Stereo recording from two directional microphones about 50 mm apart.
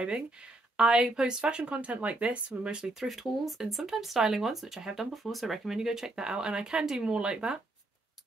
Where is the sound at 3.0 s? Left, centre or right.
Centre.